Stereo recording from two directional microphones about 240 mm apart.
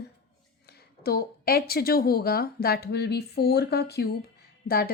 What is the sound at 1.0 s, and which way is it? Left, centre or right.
A woman's voice, left.